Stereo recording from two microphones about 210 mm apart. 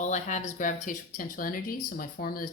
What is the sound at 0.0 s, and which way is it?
Speech, 35° left (ahead or behind).